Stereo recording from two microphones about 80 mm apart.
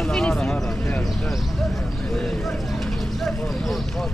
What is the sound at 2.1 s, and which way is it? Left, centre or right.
Speech, centre.